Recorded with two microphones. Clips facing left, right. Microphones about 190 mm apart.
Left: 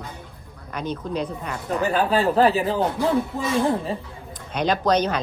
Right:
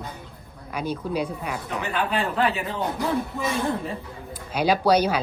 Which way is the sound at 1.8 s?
35° left (ahead or behind).